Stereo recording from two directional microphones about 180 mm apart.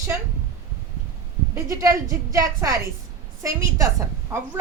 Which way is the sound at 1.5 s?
15° right (ahead or behind).